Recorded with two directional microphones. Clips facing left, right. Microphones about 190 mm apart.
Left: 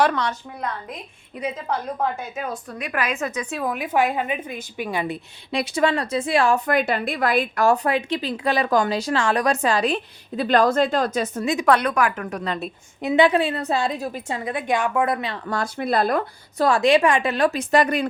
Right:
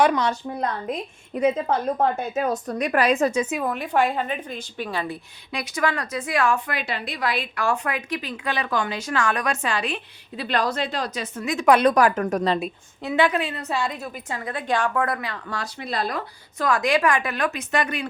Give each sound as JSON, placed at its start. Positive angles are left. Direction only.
{"t": 0.0, "sound": "a woman's voice", "side_deg": -15}
{"t": 1.3, "sound": "a woman's voice", "side_deg": -45}
{"t": 3.6, "sound": "a woman's voice", "side_deg": 5}
{"t": 6.7, "sound": "a woman's voice", "side_deg": 50}
{"t": 11.9, "sound": "a woman's voice", "side_deg": -35}
{"t": 13.0, "sound": "a woman's voice", "side_deg": 20}
{"t": 15.4, "sound": "speech", "side_deg": 50}
{"t": 16.6, "sound": "a woman's voice", "side_deg": 30}